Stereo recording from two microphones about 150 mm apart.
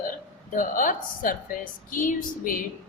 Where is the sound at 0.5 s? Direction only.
60° left (ahead or behind).